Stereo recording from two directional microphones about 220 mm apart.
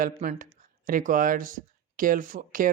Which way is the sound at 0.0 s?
35° right (ahead or behind).